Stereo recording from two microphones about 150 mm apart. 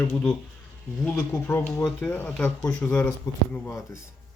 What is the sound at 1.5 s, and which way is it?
Speech, 15° left (ahead or behind).